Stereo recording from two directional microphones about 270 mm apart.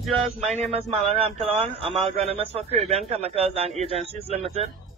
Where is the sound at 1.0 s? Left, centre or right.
Right.